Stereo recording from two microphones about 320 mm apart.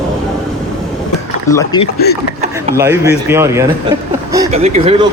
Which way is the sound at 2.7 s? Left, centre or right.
Centre.